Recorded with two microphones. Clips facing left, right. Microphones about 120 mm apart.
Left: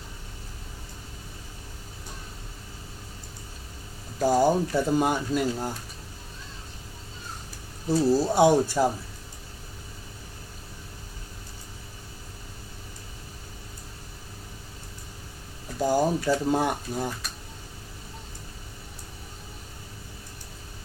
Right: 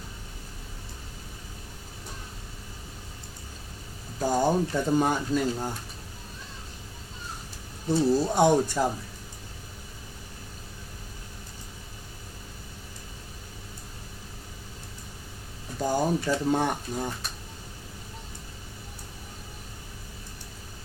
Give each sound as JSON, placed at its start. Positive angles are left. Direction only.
{"t": 4.3, "sound": "speech", "side_deg": 5}
{"t": 7.9, "sound": "speech", "side_deg": 5}
{"t": 15.8, "sound": "speech", "side_deg": 10}